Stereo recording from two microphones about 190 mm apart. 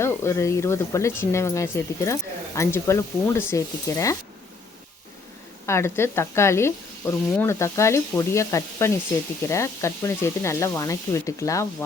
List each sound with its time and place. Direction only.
0.0 s speech: 15° left (ahead or behind)
5.6 s speech: 15° left (ahead or behind)